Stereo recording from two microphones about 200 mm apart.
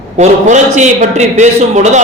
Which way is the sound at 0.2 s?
35° right (ahead or behind).